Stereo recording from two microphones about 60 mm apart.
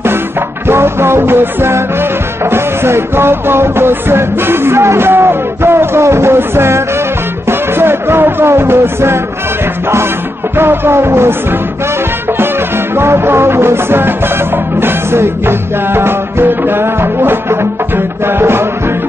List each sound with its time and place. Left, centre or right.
0.7 s music: right
10.6 s music: right
12.9 s music: right